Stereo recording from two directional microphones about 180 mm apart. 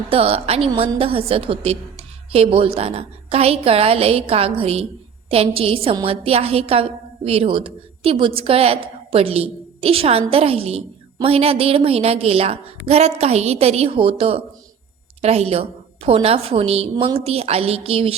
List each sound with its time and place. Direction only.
0.1 s a woman's voice: 30° right (ahead or behind)